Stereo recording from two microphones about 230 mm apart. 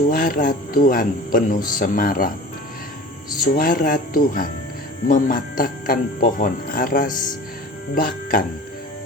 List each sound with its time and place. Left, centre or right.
0.1 s speech: left
3.5 s speech: left